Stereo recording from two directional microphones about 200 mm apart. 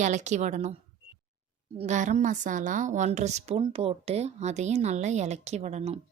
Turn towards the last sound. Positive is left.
turn(degrees=-35)  # may be behind; listen again after turning